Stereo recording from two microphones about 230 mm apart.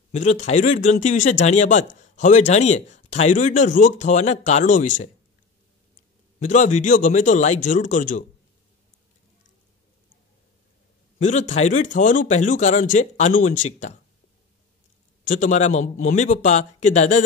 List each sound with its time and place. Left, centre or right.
0.1 s speech: left
6.4 s speech: left
11.1 s speech: left
15.2 s speech: left